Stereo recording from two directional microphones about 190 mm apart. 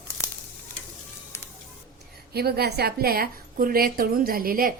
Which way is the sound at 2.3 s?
55° right (ahead or behind).